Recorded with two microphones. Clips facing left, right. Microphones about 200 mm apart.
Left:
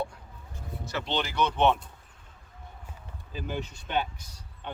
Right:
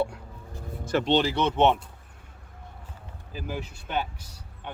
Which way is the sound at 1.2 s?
30° right (ahead or behind).